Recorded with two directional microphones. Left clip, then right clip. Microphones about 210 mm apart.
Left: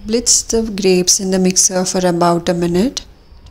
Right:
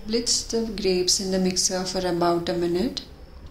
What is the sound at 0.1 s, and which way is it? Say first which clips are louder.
A woman's voice: left 9 dB; 45° left (ahead or behind).